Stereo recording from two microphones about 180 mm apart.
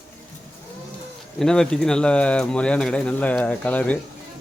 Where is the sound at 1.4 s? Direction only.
5° left (ahead or behind).